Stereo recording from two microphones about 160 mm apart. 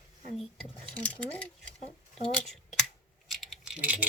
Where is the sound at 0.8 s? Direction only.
10° left (ahead or behind).